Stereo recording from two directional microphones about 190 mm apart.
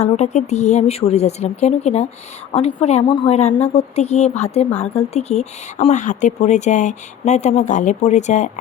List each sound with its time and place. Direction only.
0.0 s a woman's voice: 35° left (ahead or behind)